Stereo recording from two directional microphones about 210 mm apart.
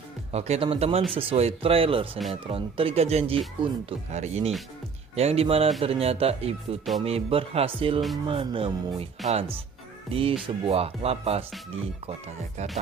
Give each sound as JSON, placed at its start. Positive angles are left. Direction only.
{"t": 0.3, "sound": "speech", "side_deg": -30}